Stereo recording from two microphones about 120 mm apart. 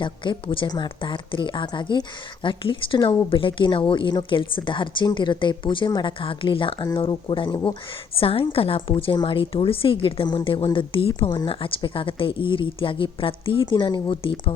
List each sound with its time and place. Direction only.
0.0 s a woman's voice: 45° left (ahead or behind)
8.1 s a woman's voice: 50° left (ahead or behind)